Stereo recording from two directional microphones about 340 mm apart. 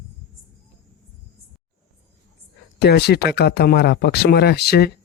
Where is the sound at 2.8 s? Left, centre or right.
Left.